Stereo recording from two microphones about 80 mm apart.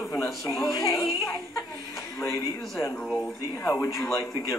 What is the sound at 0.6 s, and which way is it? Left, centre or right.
Speech, left.